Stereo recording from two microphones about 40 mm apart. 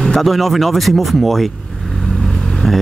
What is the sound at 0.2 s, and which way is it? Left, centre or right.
Speech, centre.